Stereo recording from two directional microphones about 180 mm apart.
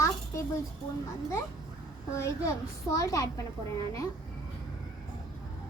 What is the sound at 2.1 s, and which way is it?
A child's voice, 15° left (ahead or behind).